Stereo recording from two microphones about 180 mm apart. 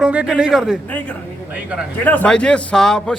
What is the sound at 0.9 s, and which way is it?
A man's voice, 10° left (ahead or behind).